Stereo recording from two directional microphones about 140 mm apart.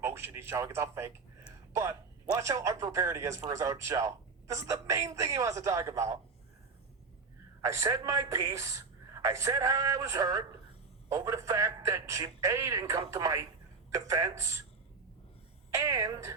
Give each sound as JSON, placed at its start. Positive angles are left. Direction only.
{"t": 0.0, "sound": "speech", "side_deg": -15}
{"t": 7.6, "sound": "speech", "side_deg": -20}
{"t": 15.7, "sound": "speech", "side_deg": -20}